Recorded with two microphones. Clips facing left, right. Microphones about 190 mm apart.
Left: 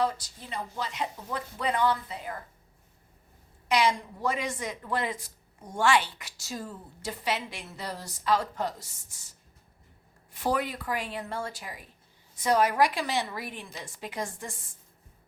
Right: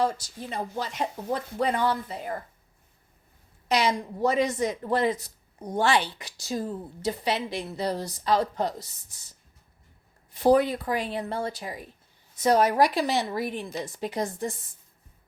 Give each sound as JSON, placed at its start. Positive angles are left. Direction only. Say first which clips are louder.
{"t": 0.5, "sound": "speech", "louder": "right 3 dB", "side_deg": -45}
{"t": 3.7, "sound": "a woman's voice", "louder": "right 1 dB", "side_deg": -40}
{"t": 10.3, "sound": "a woman's voice", "louder": "right 9 dB", "side_deg": -35}